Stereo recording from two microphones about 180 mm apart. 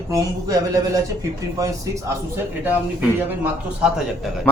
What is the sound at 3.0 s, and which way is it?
A man's voice, 5° right (ahead or behind).